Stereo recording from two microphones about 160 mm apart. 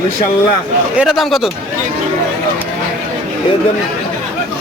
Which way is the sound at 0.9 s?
Centre (ahead or behind).